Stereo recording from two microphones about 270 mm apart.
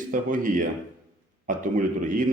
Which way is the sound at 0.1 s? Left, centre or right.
Right.